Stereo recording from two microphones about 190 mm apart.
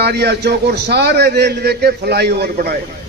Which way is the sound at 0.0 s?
60° right (ahead or behind).